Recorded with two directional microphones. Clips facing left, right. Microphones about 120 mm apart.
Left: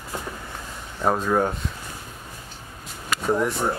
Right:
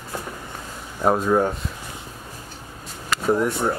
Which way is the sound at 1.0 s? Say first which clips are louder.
Right 3 dB; 10° right (ahead or behind).